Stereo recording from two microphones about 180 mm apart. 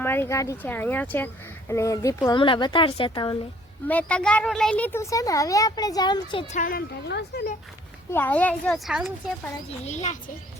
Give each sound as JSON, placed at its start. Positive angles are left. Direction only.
{"t": 0.0, "sound": "speech", "side_deg": 10}
{"t": 3.8, "sound": "speech", "side_deg": 5}
{"t": 6.5, "sound": "speech", "side_deg": 50}
{"t": 8.1, "sound": "a child's voice", "side_deg": 10}
{"t": 9.8, "sound": "a child's voice", "side_deg": 40}